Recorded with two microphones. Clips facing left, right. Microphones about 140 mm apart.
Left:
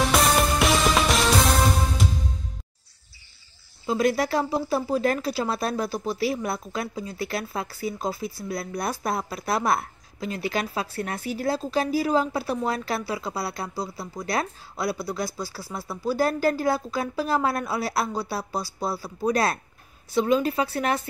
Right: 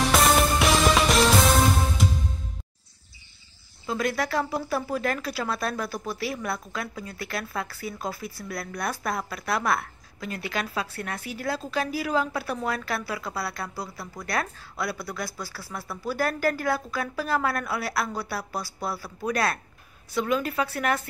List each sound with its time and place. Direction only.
0.1 s music: centre (ahead or behind)
3.8 s speech: 30° left (ahead or behind)